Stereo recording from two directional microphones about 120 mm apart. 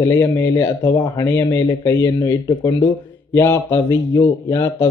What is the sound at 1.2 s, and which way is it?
Speech, 15° left (ahead or behind).